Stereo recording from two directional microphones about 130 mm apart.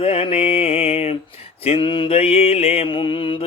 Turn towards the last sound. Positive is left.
turn(degrees=40)  # may be behind; listen again after turning